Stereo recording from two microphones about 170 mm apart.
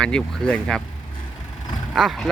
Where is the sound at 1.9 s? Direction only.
Centre (ahead or behind).